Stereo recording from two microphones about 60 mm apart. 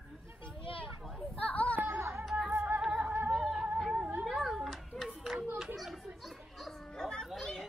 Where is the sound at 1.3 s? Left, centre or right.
Left.